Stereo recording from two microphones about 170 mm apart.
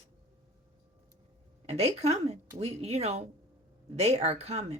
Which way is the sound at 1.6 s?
40° right (ahead or behind).